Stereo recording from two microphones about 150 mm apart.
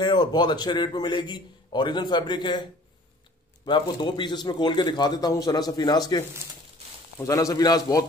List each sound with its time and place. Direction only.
0.0 s a man's voice: 30° left (ahead or behind)